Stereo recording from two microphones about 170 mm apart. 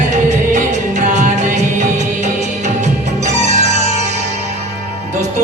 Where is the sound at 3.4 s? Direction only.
45° right (ahead or behind).